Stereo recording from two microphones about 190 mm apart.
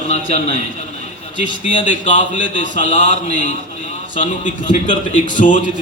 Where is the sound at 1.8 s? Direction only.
40° left (ahead or behind).